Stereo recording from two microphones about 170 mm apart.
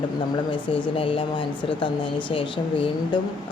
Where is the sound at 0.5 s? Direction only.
30° left (ahead or behind).